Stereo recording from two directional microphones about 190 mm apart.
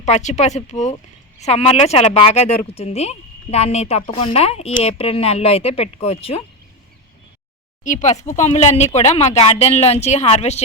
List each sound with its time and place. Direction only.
0.0 s speech: 40° left (ahead or behind)
7.9 s speech: 40° left (ahead or behind)